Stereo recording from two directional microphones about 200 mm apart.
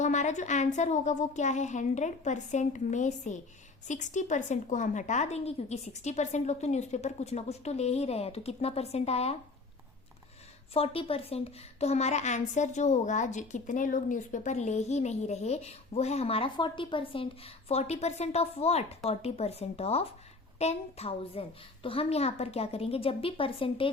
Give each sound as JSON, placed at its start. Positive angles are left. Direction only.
{"t": 0.0, "sound": "a woman's voice", "side_deg": 35}
{"t": 10.8, "sound": "a woman's voice", "side_deg": 30}